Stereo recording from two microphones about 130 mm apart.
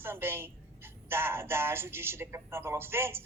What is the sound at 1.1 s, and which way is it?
Speech, 20° right (ahead or behind).